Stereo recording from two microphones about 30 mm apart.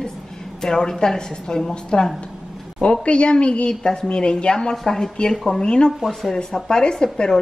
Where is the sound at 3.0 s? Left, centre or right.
Left.